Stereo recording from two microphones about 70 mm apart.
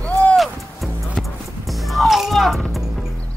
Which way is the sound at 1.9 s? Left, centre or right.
Centre.